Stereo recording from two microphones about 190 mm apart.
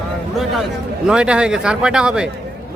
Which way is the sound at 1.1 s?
5° right (ahead or behind).